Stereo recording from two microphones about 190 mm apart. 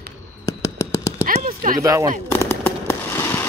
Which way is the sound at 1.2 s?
45° right (ahead or behind).